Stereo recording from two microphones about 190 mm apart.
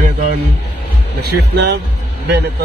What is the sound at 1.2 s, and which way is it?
Speech, 65° right (ahead or behind).